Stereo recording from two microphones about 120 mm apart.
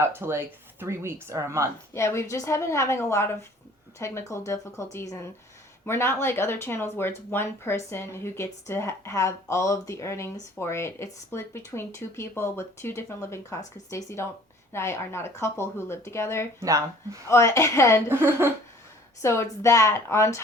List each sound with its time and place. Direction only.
0.0 s speech: 20° right (ahead or behind)
1.9 s speech: 25° left (ahead or behind)
16.6 s speech: 25° right (ahead or behind)
17.2 s speech: 25° left (ahead or behind)
18.1 s speech: 20° right (ahead or behind)
19.2 s speech: 25° left (ahead or behind)